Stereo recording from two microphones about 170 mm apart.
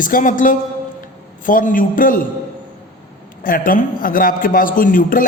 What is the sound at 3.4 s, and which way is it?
A man's voice, 55° left (ahead or behind).